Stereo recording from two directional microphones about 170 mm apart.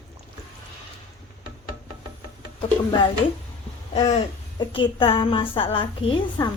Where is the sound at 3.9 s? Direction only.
30° left (ahead or behind).